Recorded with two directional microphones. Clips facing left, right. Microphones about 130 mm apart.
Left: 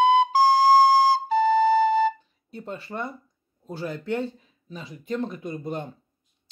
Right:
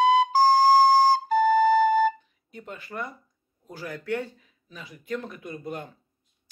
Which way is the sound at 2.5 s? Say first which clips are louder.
Left 3 dB; 30° left (ahead or behind).